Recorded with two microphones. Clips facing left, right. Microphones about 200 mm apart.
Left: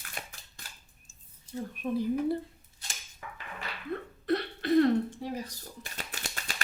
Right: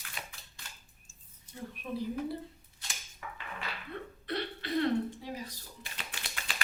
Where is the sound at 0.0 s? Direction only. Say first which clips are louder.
Left 2 dB; 45° left (ahead or behind).